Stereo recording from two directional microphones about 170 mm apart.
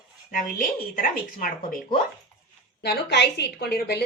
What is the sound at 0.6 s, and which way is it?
Speech, 55° left (ahead or behind).